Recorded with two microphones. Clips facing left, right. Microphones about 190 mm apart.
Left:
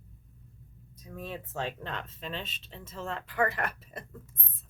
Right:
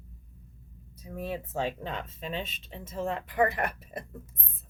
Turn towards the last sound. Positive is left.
turn(degrees=-15)  # may be behind; listen again after turning